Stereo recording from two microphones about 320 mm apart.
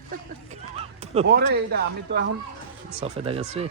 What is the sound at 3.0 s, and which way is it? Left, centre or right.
Speech, centre.